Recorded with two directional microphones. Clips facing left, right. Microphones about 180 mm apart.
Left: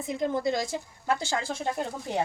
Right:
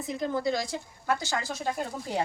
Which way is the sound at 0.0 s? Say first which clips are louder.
Left 1 dB; 20° left (ahead or behind).